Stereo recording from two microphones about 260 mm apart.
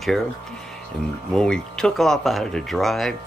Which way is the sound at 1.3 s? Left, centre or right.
Centre.